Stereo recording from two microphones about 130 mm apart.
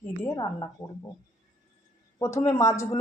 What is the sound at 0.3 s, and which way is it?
Speech, 30° left (ahead or behind).